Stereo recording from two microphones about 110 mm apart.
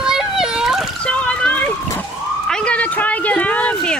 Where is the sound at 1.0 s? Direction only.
10° left (ahead or behind).